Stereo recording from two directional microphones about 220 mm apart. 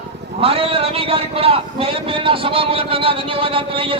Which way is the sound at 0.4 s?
25° right (ahead or behind).